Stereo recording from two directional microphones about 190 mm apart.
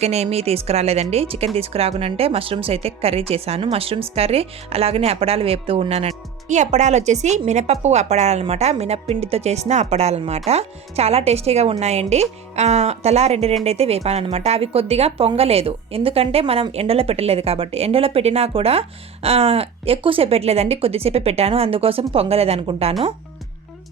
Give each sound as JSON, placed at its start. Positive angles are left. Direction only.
{"t": 0.0, "sound": "speech", "side_deg": -35}